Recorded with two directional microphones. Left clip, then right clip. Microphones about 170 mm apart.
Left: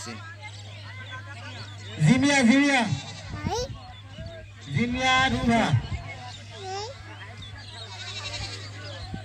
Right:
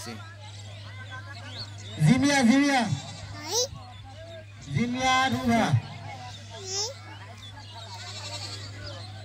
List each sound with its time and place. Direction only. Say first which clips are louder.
1.1 s a sound: right 2 dB; centre (ahead or behind)
2.9 s bleat: left 2 dB; 80° right
3.4 s children playing: right 2 dB; 40° left (ahead or behind)
4.7 s speech: left 2 dB; centre (ahead or behind)
7.9 s goat: left 3 dB; 80° right